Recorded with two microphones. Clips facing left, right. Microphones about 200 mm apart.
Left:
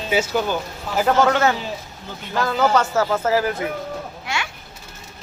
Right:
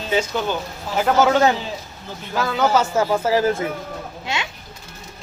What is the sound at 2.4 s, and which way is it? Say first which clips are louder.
Speech: even; centre (ahead or behind).